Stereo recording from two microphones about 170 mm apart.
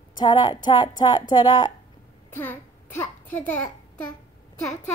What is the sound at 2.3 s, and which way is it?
A child's voice, 10° left (ahead or behind).